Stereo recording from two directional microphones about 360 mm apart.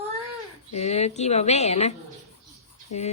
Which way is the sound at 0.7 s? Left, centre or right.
Centre.